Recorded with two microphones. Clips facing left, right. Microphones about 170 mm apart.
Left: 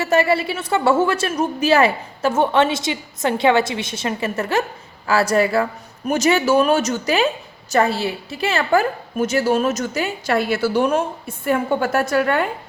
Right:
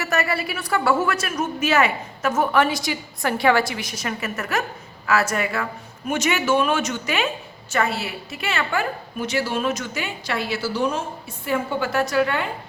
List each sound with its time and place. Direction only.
0.0 s a woman's voice: 25° left (ahead or behind); by 12.5 s 50° left (ahead or behind)